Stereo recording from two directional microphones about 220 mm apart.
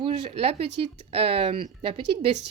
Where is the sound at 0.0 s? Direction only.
25° right (ahead or behind).